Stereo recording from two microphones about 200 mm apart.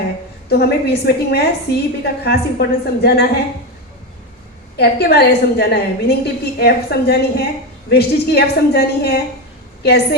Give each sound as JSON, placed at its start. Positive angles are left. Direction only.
{"t": 0.4, "sound": "a woman's voice", "side_deg": 50}
{"t": 4.8, "sound": "a woman's voice", "side_deg": 55}